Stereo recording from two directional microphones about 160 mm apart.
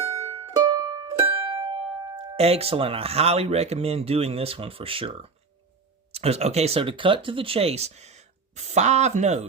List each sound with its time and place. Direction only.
0.0 s music: 20° right (ahead or behind)
2.1 s speech: 40° right (ahead or behind)